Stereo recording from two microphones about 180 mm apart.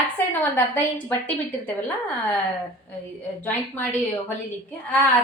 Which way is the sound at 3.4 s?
10° left (ahead or behind).